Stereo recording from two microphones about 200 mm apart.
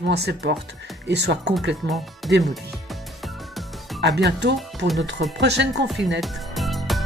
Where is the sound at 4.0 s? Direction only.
60° right (ahead or behind).